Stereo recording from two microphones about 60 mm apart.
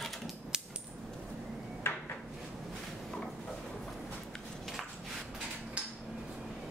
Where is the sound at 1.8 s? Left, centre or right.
Left.